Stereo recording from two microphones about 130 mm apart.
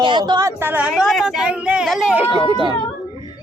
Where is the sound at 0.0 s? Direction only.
35° right (ahead or behind).